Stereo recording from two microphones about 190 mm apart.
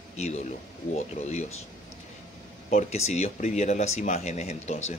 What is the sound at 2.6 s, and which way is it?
Speech, 40° left (ahead or behind).